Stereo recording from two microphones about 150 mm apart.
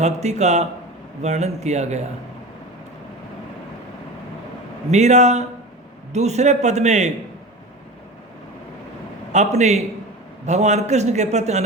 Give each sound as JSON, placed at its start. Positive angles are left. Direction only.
{"t": 0.0, "sound": "a man's voice", "side_deg": -50}
{"t": 4.9, "sound": "a man's voice", "side_deg": -50}
{"t": 9.3, "sound": "a man's voice", "side_deg": -50}